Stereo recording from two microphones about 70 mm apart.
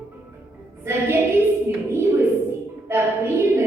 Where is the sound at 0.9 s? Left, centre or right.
Right.